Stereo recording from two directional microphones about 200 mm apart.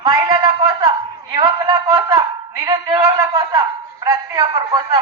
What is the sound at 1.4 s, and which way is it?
A man's voice, 20° right (ahead or behind).